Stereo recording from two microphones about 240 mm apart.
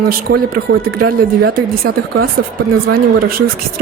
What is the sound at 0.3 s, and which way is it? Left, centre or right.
Speech, right.